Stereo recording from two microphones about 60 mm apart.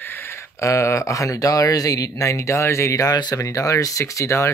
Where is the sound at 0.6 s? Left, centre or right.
Left.